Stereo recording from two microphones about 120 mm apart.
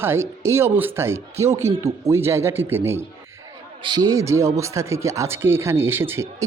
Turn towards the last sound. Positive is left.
turn(degrees=-20)  # may be behind; listen again after turning